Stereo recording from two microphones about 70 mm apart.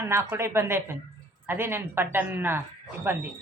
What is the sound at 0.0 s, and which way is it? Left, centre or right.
Speech, right.